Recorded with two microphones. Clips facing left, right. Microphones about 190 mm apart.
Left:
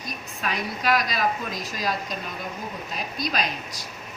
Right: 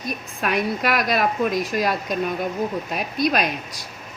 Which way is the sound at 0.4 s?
60° right (ahead or behind).